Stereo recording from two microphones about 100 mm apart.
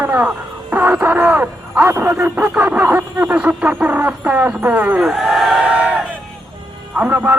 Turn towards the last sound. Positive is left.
turn(degrees=-15)  # may be behind; listen again after turning